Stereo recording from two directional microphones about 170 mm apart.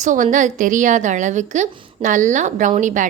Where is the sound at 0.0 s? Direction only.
50° right (ahead or behind).